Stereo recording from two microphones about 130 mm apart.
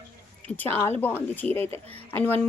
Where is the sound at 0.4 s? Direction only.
15° left (ahead or behind).